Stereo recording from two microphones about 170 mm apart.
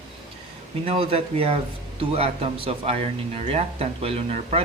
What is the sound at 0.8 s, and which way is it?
Speech, 35° right (ahead or behind).